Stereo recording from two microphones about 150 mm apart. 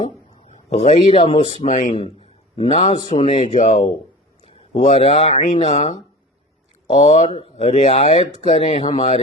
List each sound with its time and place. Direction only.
0.7 s speech: 40° left (ahead or behind)
1.6 s speech: 55° left (ahead or behind)
2.2 s a sound: 40° left (ahead or behind)
3.0 s speech: 30° left (ahead or behind)
3.5 s speech: 50° left (ahead or behind)
6.9 s speech: 50° left (ahead or behind)